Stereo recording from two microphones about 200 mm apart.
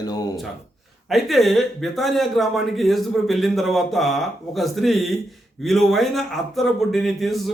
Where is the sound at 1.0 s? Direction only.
Centre (ahead or behind).